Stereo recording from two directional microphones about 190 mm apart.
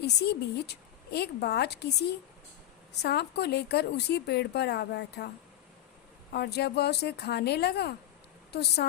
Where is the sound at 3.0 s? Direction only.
60° left (ahead or behind).